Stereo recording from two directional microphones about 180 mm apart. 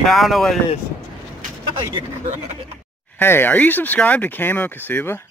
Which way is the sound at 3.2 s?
10° left (ahead or behind).